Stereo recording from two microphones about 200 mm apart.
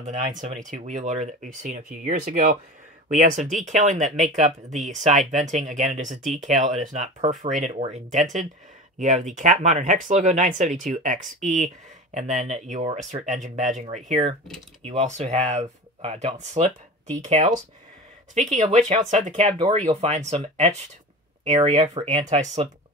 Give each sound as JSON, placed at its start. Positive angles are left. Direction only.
{"t": 0.0, "sound": "speech", "side_deg": -40}
{"t": 18.3, "sound": "speech", "side_deg": -35}